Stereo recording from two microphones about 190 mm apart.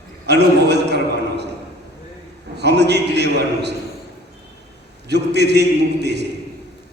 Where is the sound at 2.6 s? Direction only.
60° right (ahead or behind).